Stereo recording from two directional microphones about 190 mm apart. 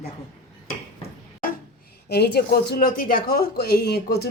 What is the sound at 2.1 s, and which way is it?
Speech, 60° left (ahead or behind).